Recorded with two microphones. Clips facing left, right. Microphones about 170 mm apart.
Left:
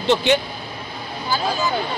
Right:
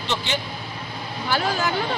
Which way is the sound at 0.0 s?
55° left (ahead or behind).